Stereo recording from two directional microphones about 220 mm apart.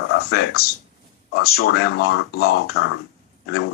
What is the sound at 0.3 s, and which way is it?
Speech, 45° left (ahead or behind).